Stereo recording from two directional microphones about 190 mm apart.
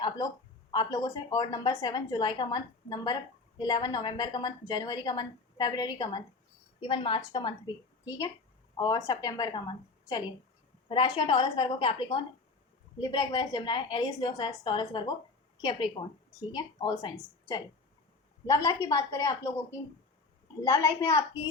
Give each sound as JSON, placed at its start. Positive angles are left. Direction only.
{"t": 0.7, "sound": "a woman's voice", "side_deg": 20}
{"t": 18.4, "sound": "a woman's voice", "side_deg": 20}
{"t": 20.7, "sound": "a woman's voice", "side_deg": 15}